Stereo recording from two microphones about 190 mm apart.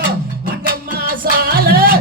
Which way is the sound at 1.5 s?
50° right (ahead or behind).